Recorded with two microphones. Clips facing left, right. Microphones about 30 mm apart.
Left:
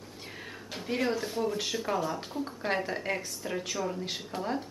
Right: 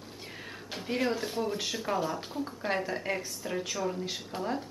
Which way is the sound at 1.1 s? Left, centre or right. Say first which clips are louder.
Left 1 dB; centre.